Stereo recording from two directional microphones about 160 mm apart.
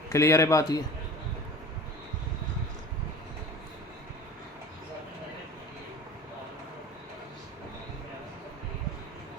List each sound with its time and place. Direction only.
0.1 s a man's voice: 20° left (ahead or behind)